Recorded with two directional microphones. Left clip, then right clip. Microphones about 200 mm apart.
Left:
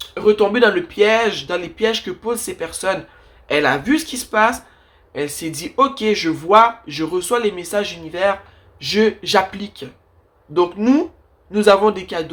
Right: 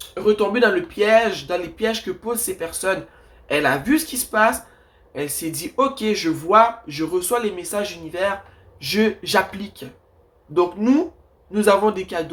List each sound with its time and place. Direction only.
0.1 s speech: 30° left (ahead or behind)